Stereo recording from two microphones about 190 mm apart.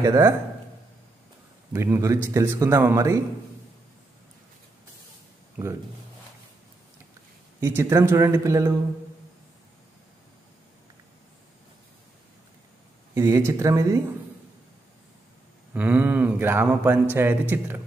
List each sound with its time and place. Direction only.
0.0 s speech: 20° right (ahead or behind)
1.7 s speech: 15° right (ahead or behind)
5.6 s speech: 5° right (ahead or behind)
7.6 s speech: 15° right (ahead or behind)
13.1 s speech: 15° right (ahead or behind)
15.7 s speech: 5° right (ahead or behind)